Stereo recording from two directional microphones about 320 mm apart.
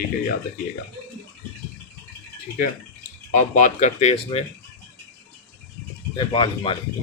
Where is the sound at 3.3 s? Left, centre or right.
Left.